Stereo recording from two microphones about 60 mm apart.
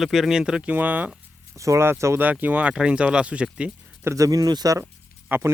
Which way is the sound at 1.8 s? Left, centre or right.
Right.